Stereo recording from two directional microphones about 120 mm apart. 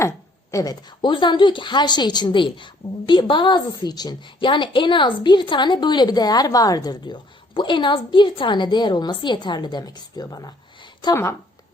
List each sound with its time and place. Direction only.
0.5 s a woman's voice: 30° left (ahead or behind)